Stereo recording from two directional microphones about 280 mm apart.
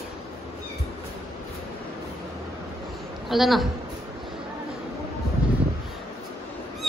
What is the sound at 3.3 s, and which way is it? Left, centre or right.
Speech, centre.